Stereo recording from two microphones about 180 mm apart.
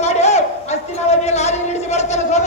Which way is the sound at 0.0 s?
35° left (ahead or behind).